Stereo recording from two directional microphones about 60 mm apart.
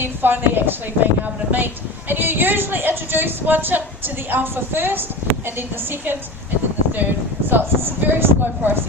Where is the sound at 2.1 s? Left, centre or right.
Right.